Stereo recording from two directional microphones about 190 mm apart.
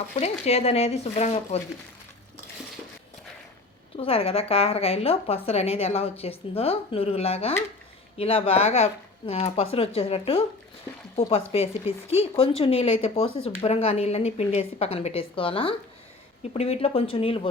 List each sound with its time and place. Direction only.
0.2 s speech: 35° left (ahead or behind)
3.9 s speech: 30° left (ahead or behind)